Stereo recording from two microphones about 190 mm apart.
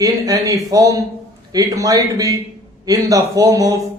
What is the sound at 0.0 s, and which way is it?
Speech, 20° right (ahead or behind).